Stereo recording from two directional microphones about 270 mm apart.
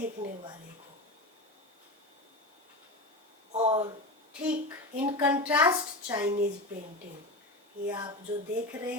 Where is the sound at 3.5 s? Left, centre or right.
Right.